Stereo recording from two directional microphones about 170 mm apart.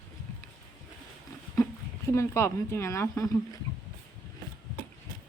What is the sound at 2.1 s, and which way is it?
Speech, 15° left (ahead or behind).